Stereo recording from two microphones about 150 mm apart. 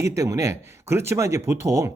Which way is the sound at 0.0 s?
20° right (ahead or behind).